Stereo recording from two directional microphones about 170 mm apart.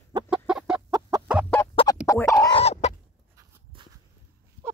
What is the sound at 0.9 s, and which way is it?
Fowl, 20° right (ahead or behind).